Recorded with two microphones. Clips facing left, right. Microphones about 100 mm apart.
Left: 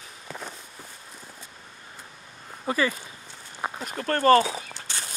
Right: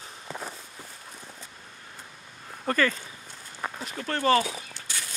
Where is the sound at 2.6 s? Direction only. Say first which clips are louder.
Even; 10° left (ahead or behind).